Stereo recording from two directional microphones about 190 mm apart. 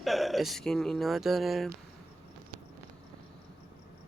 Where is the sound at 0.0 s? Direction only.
Centre (ahead or behind).